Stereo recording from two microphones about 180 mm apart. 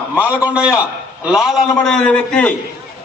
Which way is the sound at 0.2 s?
10° right (ahead or behind).